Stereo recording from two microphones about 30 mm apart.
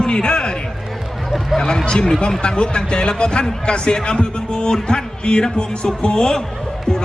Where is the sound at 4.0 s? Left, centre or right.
Left.